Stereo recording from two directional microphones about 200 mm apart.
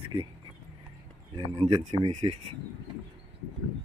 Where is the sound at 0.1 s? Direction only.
30° right (ahead or behind).